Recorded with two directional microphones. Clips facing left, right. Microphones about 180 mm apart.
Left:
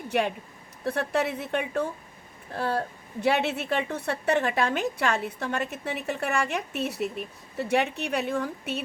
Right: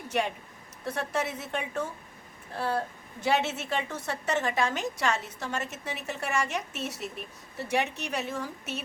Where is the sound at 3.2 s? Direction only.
60° left (ahead or behind).